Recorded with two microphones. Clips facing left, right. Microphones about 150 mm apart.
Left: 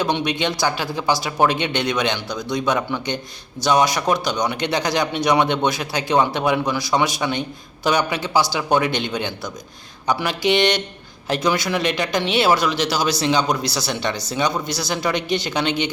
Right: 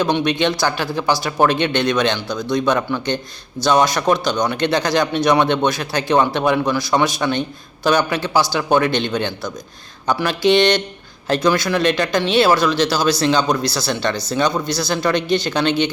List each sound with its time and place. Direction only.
0.0 s speech: 20° left (ahead or behind)